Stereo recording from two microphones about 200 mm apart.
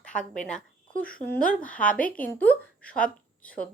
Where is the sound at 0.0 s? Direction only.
5° left (ahead or behind).